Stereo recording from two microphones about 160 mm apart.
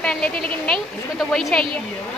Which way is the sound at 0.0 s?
5° left (ahead or behind).